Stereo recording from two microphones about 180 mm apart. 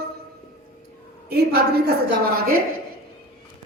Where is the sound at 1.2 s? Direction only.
60° right (ahead or behind).